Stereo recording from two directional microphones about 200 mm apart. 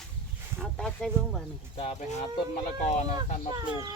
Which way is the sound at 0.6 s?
Centre (ahead or behind).